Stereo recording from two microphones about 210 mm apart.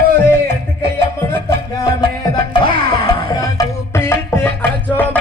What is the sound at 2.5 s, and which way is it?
Music, 20° left (ahead or behind).